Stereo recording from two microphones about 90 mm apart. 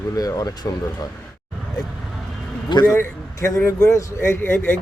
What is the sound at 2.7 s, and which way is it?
Speech, 55° left (ahead or behind).